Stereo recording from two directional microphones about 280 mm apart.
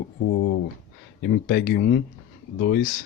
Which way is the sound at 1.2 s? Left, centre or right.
Left.